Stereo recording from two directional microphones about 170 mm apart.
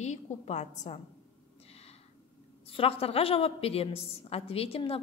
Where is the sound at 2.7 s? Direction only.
35° left (ahead or behind).